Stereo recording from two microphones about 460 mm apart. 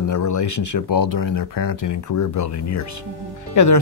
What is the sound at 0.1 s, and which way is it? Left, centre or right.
Speech, left.